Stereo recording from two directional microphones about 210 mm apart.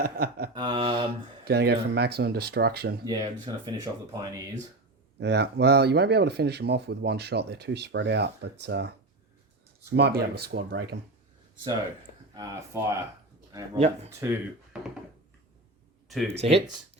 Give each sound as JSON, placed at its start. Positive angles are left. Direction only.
{"t": 0.0, "sound": "speech", "side_deg": -45}
{"t": 0.5, "sound": "mantra", "side_deg": -20}
{"t": 0.9, "sound": "speech", "side_deg": -50}
{"t": 3.0, "sound": "mantra", "side_deg": -20}
{"t": 4.1, "sound": "speech", "side_deg": -15}
{"t": 5.2, "sound": "speech", "side_deg": -50}
{"t": 12.3, "sound": "speech", "side_deg": -15}
{"t": 13.7, "sound": "speech", "side_deg": -30}
{"t": 14.1, "sound": "speech", "side_deg": -10}
{"t": 16.0, "sound": "speech", "side_deg": 0}